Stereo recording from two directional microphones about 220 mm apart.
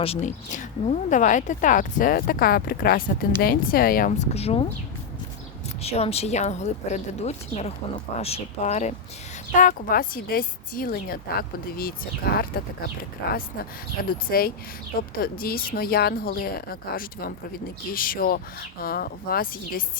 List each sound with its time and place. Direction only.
0.0 s a woman's voice: 30° left (ahead or behind)
5.8 s a woman's voice: 30° left (ahead or behind)